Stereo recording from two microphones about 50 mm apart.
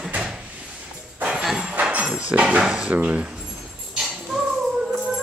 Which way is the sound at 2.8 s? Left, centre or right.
Right.